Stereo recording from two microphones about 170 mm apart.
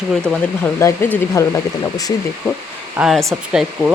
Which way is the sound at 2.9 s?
Centre (ahead or behind).